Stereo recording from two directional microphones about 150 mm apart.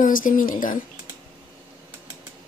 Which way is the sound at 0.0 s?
65° left (ahead or behind).